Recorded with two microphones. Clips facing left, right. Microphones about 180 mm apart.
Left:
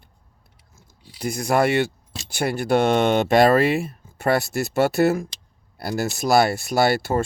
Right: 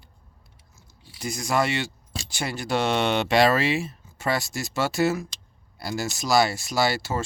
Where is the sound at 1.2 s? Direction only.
55° left (ahead or behind).